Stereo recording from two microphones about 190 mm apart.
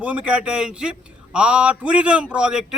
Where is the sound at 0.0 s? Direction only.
5° right (ahead or behind).